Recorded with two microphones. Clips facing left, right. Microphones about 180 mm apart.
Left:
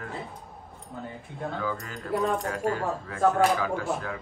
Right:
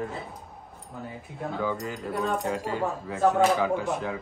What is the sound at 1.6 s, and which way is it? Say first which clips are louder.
Speech: right 3 dB; 20° right (ahead or behind).